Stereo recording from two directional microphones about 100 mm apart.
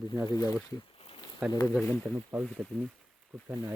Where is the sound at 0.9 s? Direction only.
70° left (ahead or behind).